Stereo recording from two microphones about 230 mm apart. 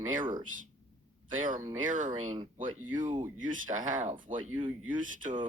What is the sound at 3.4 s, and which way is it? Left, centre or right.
Speech, right.